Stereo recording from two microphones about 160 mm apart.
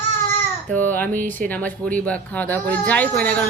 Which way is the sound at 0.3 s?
10° left (ahead or behind).